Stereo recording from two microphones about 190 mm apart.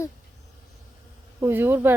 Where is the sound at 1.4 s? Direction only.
10° right (ahead or behind).